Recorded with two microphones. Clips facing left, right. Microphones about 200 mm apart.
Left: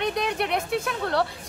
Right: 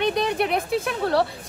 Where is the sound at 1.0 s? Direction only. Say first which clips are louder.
Right 6 dB; 30° right (ahead or behind).